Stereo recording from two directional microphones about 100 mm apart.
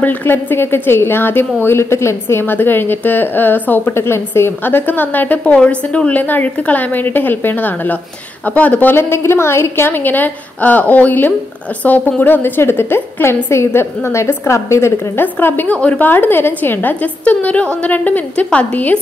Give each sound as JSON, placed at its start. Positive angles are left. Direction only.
{"t": 0.0, "sound": "a woman's voice", "side_deg": 20}